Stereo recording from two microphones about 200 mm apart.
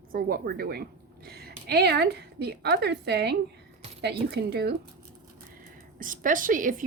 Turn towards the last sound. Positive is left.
turn(degrees=-40)  # may be behind; listen again after turning